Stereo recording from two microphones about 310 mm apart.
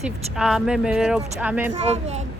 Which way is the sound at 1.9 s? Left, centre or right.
Right.